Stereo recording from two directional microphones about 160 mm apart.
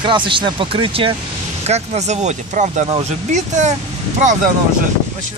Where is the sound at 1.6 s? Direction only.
45° right (ahead or behind).